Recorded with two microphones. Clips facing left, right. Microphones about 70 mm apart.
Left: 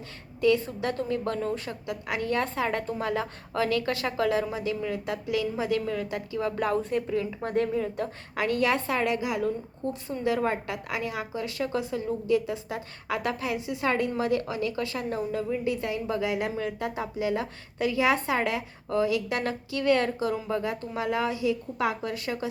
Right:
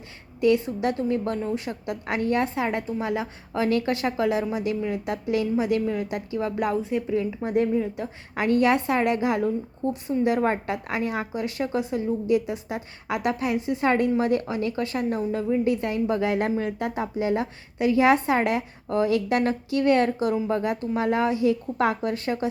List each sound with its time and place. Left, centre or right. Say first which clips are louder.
0.3 s a woman's voice: right 3 dB; right
8.4 s a woman's voice: right 5 dB; right